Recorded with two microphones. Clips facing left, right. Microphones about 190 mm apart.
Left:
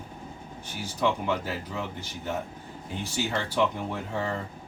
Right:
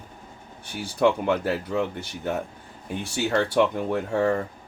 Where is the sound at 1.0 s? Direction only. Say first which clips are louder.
Right 6 dB; 60° right (ahead or behind).